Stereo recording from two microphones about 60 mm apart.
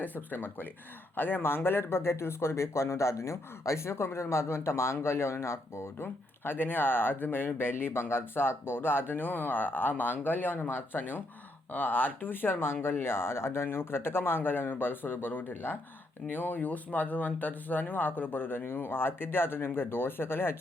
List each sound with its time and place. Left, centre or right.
0.0 s speech: left